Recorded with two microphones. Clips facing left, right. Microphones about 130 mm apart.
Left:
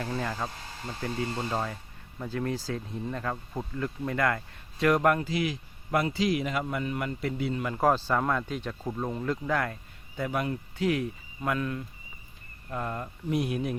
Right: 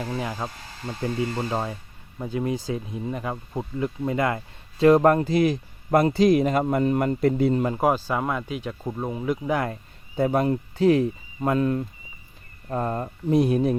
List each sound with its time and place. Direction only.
0.0 s speech: 15° right (ahead or behind); by 5.2 s 30° right (ahead or behind)
5.2 s speech: 40° right (ahead or behind)
7.8 s speech: 10° right (ahead or behind)
10.2 s speech: 35° right (ahead or behind)